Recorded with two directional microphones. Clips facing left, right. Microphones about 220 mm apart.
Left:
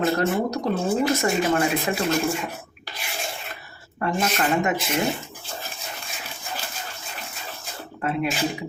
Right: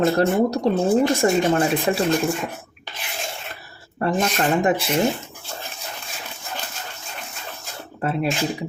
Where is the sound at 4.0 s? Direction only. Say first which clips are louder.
Right 3 dB; 35° right (ahead or behind).